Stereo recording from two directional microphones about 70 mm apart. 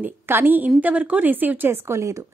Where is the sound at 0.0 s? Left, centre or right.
Right.